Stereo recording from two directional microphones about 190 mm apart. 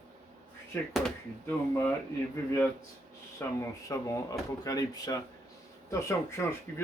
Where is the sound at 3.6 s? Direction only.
15° left (ahead or behind).